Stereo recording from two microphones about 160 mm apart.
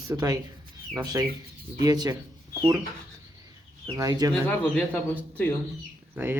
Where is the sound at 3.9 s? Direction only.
25° right (ahead or behind).